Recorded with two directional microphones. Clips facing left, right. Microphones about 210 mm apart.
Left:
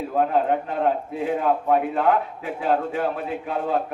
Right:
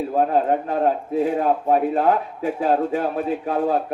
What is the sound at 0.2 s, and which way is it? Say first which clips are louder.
A man's voice: right 1 dB; 40° right (ahead or behind).